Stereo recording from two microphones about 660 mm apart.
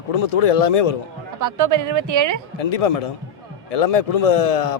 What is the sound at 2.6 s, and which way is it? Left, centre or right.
Speech, left.